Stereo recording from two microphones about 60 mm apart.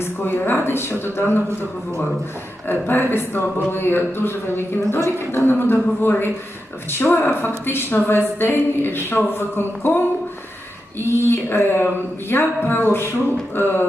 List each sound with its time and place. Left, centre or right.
0.0 s a woman's voice: left
2.6 s a woman's voice: left
11.0 s a woman's voice: left
12.3 s a sound: left
12.6 s a woman's voice: left